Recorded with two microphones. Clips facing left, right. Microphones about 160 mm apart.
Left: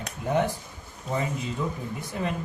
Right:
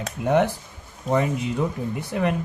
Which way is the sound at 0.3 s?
80° right.